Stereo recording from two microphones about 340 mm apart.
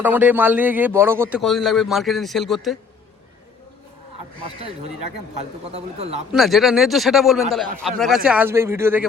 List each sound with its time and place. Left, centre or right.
0.0 s a man's voice: centre
4.4 s speech: centre
6.3 s a man's voice: centre